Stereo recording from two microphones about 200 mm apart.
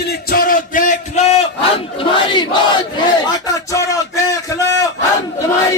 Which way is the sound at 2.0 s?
20° left (ahead or behind).